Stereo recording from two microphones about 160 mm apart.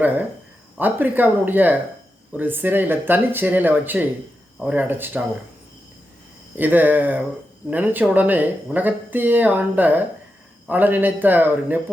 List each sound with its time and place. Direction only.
0.8 s speech: 10° right (ahead or behind)
6.6 s speech: 10° right (ahead or behind)